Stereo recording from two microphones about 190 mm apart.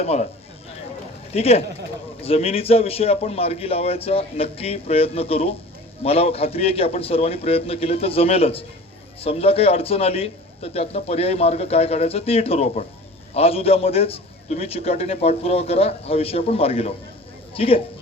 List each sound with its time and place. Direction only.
0.0 s a man's voice: 35° left (ahead or behind)
1.3 s a man's voice: 35° left (ahead or behind)